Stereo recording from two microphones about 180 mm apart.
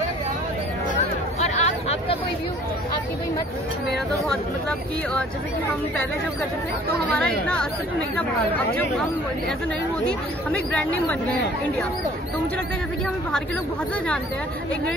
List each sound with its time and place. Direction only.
1.4 s a sound: 35° left (ahead or behind)
4.3 s speech: 5° left (ahead or behind)
7.1 s speech: 5° left (ahead or behind)
10.0 s speech: 5° left (ahead or behind)